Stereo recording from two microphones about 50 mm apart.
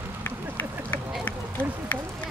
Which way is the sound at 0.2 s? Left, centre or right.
Left.